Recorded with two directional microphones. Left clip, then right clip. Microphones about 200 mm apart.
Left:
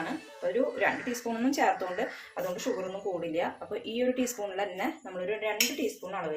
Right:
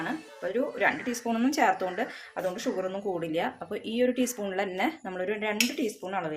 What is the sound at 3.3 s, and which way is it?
Speech, 35° right (ahead or behind).